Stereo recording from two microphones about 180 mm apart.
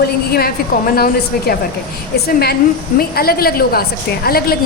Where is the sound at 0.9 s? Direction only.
60° left (ahead or behind).